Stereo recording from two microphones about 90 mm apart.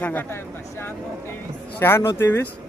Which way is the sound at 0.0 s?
20° left (ahead or behind).